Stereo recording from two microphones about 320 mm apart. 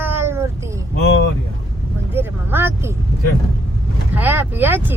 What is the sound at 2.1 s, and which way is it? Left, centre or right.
Speech, centre.